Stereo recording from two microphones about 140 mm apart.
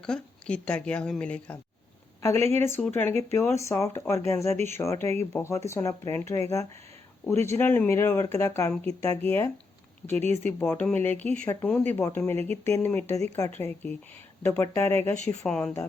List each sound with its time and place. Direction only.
0.0 s a woman's voice: 5° left (ahead or behind)